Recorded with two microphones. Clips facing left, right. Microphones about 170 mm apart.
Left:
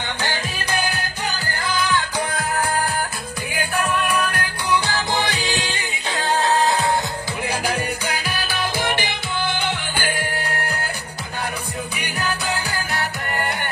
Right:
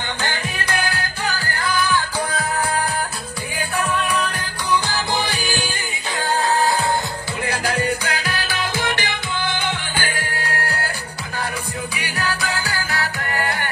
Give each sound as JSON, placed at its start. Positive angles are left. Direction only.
{"t": 0.2, "sound": "music", "side_deg": 15}
{"t": 3.7, "sound": "music", "side_deg": 10}
{"t": 7.4, "sound": "music", "side_deg": 10}
{"t": 12.0, "sound": "music", "side_deg": 15}